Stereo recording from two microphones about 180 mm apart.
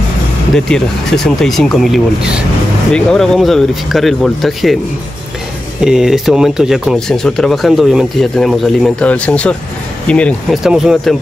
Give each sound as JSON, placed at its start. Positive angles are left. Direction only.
{"t": 0.7, "sound": "speech", "side_deg": 5}
{"t": 5.8, "sound": "speech", "side_deg": -5}